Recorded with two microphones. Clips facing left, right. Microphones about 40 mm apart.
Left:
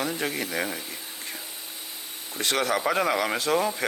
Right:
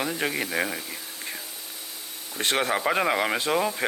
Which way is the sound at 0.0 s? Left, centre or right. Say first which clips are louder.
Right 1 dB; centre.